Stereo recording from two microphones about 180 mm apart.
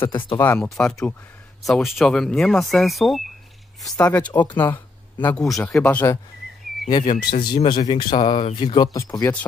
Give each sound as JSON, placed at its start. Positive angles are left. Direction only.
{"t": 0.0, "sound": "speech", "side_deg": 30}
{"t": 0.4, "sound": "speech", "side_deg": 10}
{"t": 6.9, "sound": "speech", "side_deg": 25}